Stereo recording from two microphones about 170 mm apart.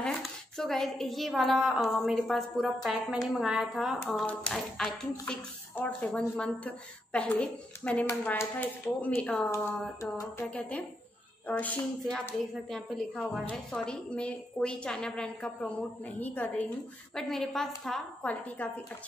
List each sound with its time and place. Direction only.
0.0 s a woman's voice: centre (ahead or behind)